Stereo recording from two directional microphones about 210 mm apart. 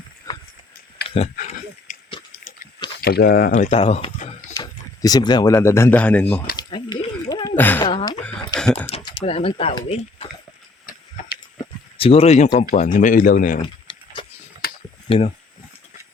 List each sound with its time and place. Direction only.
1.1 s speech: 30° left (ahead or behind)
3.0 s speech: 50° left (ahead or behind); by 4.3 s 30° left (ahead or behind)
4.5 s speech: 20° left (ahead or behind)
6.6 s a sound: 20° left (ahead or behind)
7.9 s speech: 25° left (ahead or behind)
11.5 s a sound: 25° left (ahead or behind)
12.7 s speech: 35° left (ahead or behind)
13.6 s a sound: 25° left (ahead or behind)
15.1 s speech: 25° left (ahead or behind)